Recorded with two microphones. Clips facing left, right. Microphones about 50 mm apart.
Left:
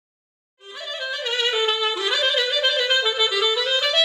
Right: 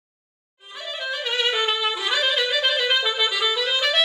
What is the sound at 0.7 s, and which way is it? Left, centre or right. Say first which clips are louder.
Music: even; centre.